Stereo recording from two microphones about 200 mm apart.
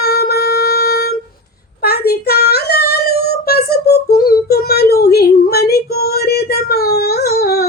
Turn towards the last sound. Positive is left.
turn(degrees=50)  # may be behind; listen again after turning